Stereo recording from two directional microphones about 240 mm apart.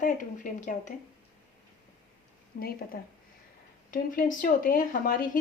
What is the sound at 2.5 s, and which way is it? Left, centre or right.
Speech, left.